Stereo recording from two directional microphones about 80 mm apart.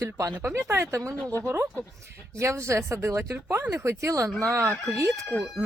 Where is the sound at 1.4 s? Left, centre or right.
Right.